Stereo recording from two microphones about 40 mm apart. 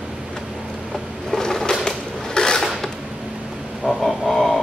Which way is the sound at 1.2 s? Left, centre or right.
Centre.